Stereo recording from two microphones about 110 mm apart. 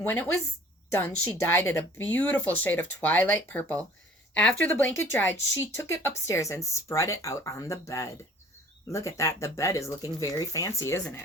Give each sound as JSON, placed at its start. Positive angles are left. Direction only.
{"t": 0.0, "sound": "speech", "side_deg": 20}